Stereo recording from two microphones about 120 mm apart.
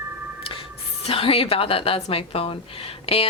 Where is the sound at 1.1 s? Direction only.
50° left (ahead or behind).